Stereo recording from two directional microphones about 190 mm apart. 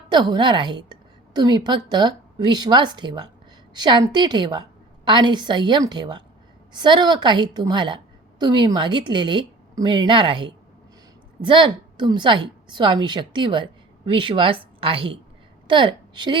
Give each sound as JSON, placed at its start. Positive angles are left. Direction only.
{"t": 0.1, "sound": "a woman's voice", "side_deg": -20}